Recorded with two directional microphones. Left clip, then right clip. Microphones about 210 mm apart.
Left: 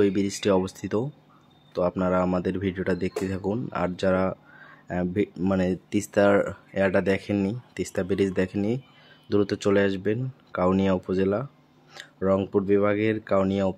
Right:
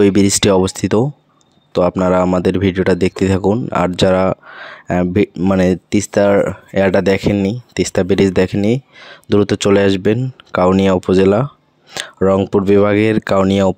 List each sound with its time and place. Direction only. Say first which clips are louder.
0.0 s speech: right 12 dB; 45° right (ahead or behind)